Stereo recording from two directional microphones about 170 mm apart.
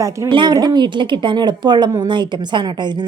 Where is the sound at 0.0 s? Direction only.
25° right (ahead or behind).